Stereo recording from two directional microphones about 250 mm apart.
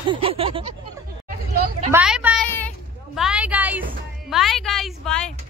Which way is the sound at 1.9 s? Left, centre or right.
Centre.